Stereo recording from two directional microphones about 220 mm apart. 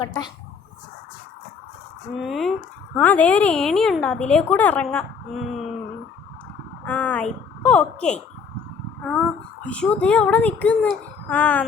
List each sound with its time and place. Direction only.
0.0 s speech: 20° left (ahead or behind)
2.2 s speech: centre (ahead or behind)
6.8 s speech: 5° left (ahead or behind)
9.6 s speech: 5° left (ahead or behind)